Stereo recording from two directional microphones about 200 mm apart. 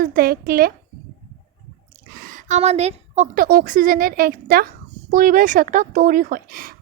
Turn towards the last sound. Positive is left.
turn(degrees=-45)  # may be behind; listen again after turning